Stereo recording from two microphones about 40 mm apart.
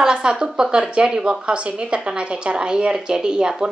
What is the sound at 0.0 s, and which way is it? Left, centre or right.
A woman's voice, right.